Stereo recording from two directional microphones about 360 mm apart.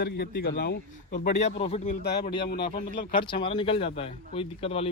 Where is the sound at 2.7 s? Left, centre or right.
Centre.